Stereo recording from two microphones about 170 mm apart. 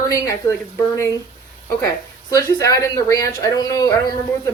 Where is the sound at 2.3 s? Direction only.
20° left (ahead or behind).